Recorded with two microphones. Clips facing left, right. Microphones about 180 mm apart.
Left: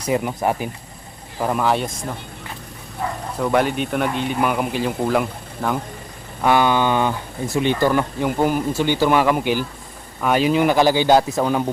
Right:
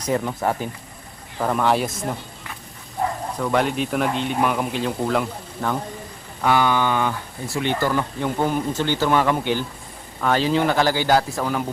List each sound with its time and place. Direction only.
0.0 s speech: 10° left (ahead or behind)
3.3 s speech: 5° left (ahead or behind)
6.4 s speech: 20° left (ahead or behind)